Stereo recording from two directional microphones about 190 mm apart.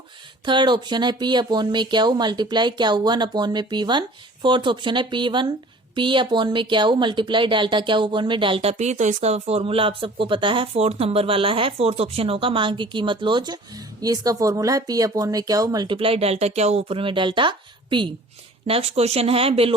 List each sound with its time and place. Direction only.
0.4 s speech: 25° right (ahead or behind)